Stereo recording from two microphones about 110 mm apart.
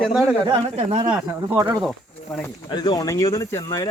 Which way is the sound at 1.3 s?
25° right (ahead or behind).